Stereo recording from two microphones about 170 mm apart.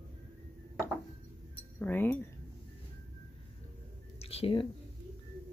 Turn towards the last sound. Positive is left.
turn(degrees=35)  # may be behind; listen again after turning